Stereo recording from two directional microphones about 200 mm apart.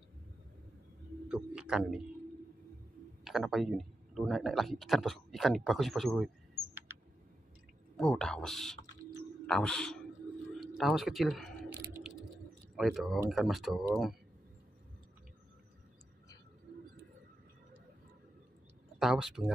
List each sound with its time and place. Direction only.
1.3 s speech: 5° right (ahead or behind)
3.3 s speech: centre (ahead or behind)
8.0 s speech: centre (ahead or behind)
11.7 s typing: 10° right (ahead or behind)
12.7 s speech: centre (ahead or behind)
18.9 s speech: centre (ahead or behind)